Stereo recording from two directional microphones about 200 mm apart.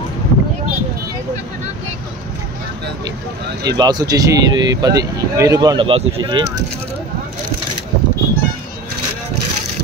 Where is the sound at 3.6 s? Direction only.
20° right (ahead or behind).